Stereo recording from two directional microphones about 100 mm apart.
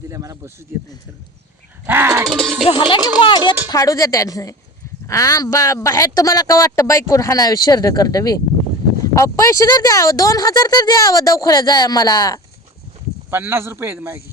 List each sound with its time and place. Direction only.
0.1 s speech: 35° right (ahead or behind)
1.9 s music: 25° right (ahead or behind)
2.3 s music: centre (ahead or behind)
2.9 s speech: 55° left (ahead or behind)
3.7 s speech: 35° left (ahead or behind)
13.3 s speech: 25° right (ahead or behind)